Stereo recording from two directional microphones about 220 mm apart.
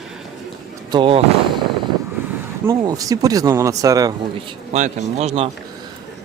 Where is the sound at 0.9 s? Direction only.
20° right (ahead or behind).